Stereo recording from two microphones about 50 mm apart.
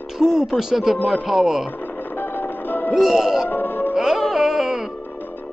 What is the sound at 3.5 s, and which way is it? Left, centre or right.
Music, left.